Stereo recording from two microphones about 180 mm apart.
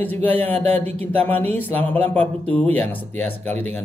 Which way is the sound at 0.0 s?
10° left (ahead or behind).